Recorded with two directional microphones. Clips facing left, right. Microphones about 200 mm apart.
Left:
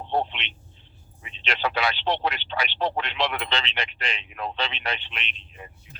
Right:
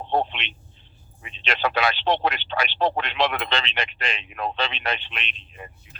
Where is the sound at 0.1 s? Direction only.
50° right (ahead or behind).